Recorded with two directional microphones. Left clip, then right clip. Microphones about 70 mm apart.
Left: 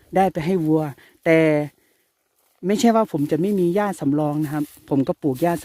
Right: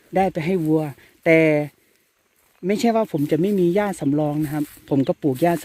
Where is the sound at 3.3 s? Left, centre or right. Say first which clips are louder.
Right 1 dB; left.